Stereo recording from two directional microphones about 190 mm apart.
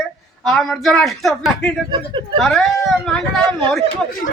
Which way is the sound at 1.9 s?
25° right (ahead or behind).